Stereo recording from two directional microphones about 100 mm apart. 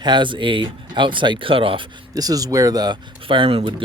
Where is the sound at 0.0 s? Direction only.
50° right (ahead or behind).